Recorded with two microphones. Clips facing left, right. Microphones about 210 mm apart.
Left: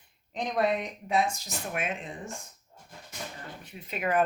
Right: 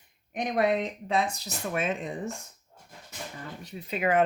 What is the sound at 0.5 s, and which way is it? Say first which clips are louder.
Speech: right 2 dB; 60° right (ahead or behind).